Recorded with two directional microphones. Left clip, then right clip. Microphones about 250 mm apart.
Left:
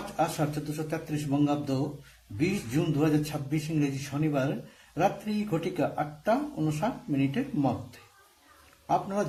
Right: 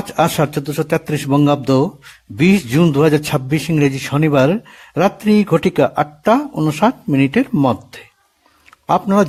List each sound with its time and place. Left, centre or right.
0.2 s speech: right